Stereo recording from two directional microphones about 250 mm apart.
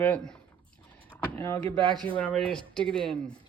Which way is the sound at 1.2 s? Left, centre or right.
Centre.